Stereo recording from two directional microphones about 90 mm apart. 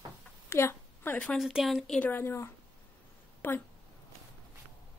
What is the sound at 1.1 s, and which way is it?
Speech, 15° left (ahead or behind).